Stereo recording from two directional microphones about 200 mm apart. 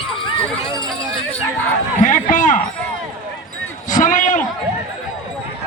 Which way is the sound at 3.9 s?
40° left (ahead or behind).